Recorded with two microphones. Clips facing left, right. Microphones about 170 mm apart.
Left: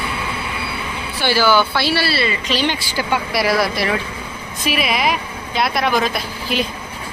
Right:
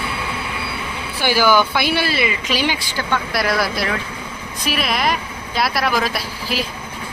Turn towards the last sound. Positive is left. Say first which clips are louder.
# left 2 dB
turn(degrees=0)  # may be behind; listen again after turning